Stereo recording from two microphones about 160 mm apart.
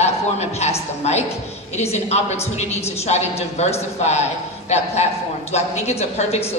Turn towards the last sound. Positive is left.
turn(degrees=40)  # may be behind; listen again after turning